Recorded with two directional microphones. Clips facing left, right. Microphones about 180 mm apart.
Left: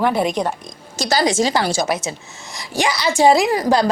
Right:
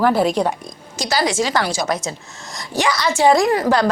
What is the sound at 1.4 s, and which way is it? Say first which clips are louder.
Speech: left 2 dB; 30° left (ahead or behind).